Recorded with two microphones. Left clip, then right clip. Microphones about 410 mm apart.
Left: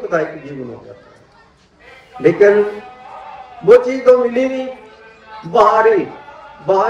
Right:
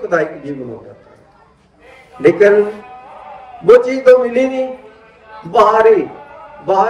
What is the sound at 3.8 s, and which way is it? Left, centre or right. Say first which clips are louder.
Speech: right 2 dB; right.